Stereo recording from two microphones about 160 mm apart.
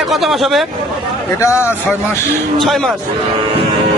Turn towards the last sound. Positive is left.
turn(degrees=0)  # may be behind; listen again after turning